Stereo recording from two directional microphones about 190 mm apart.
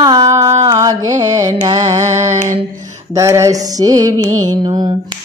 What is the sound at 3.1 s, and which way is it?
Music, 15° right (ahead or behind).